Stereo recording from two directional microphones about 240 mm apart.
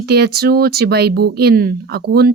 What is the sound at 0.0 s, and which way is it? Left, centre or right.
Speech, right.